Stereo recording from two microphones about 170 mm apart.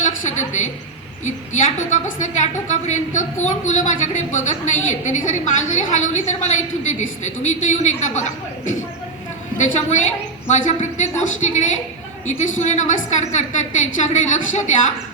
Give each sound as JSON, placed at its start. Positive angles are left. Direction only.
{"t": 0.0, "sound": "a sound", "side_deg": 45}
{"t": 1.2, "sound": "a woman's voice", "side_deg": 45}
{"t": 9.6, "sound": "a woman's voice", "side_deg": 45}